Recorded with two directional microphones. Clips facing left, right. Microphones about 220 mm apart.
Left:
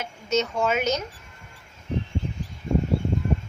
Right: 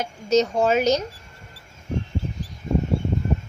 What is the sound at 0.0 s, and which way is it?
Speech, 35° right (ahead or behind).